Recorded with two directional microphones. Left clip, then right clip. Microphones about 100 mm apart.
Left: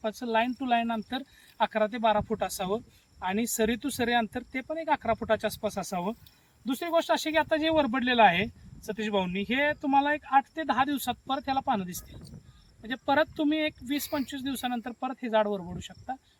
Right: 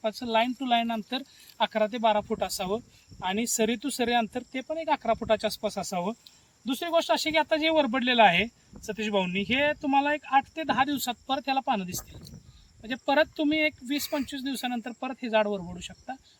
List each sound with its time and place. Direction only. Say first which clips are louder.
0.0 s speech: right 2 dB; 5° right (ahead or behind); by 16.1 s 20° right (ahead or behind)